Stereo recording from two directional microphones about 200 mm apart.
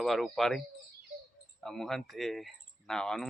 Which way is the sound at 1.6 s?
Centre (ahead or behind).